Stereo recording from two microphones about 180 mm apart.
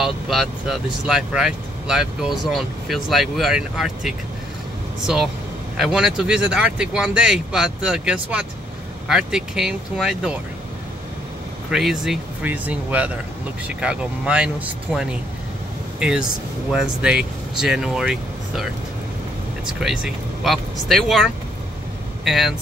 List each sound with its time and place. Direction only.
0.0 s speech: centre (ahead or behind)
5.8 s speech: centre (ahead or behind)
11.7 s speech: centre (ahead or behind)